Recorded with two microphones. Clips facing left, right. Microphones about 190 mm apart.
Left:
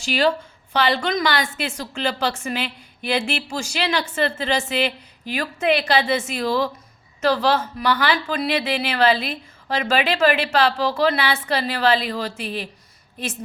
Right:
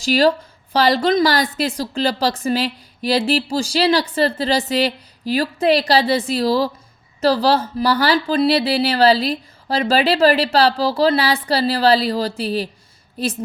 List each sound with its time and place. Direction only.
0.0 s a woman's voice: 40° right (ahead or behind)